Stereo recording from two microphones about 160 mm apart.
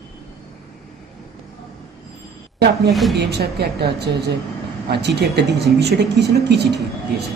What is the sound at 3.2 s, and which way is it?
Speech, 85° right.